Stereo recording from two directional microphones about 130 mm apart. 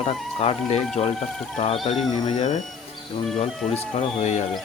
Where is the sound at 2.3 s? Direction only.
60° left (ahead or behind).